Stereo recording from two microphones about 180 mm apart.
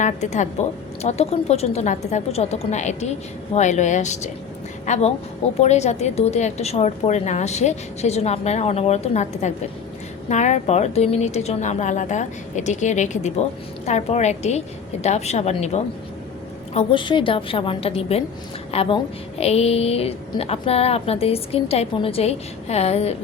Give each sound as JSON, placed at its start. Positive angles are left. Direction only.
{"t": 0.0, "sound": "a woman's voice", "side_deg": 40}
{"t": 16.7, "sound": "a woman's voice", "side_deg": 25}